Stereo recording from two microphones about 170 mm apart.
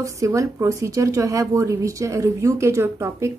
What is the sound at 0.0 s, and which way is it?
A woman's voice, 20° right (ahead or behind).